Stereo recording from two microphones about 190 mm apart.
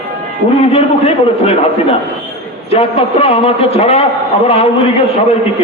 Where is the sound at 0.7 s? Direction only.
30° left (ahead or behind).